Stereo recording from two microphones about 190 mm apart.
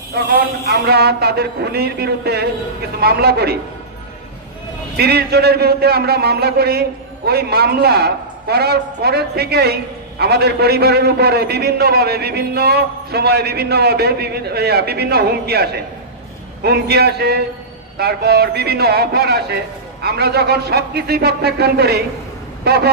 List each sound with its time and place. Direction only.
0.1 s a man's voice: 55° right (ahead or behind)
4.9 s a man's voice: 55° right (ahead or behind)